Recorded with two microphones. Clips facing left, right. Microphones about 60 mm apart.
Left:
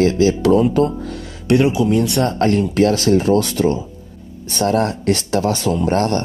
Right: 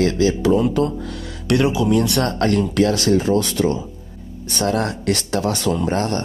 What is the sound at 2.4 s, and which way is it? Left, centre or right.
Speech, left.